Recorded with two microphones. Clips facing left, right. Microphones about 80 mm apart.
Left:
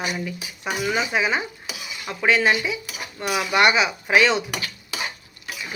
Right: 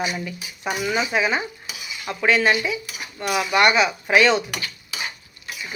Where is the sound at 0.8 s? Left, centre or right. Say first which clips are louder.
Right 1 dB; centre.